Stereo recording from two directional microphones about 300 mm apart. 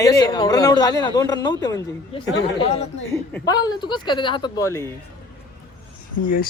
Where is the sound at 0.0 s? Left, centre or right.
Centre.